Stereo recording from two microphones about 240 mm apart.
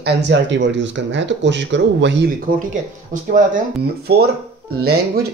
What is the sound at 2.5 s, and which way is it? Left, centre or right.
Speech, right.